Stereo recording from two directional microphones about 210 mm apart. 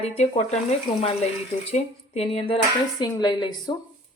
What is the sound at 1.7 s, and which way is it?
A woman's voice, 30° left (ahead or behind).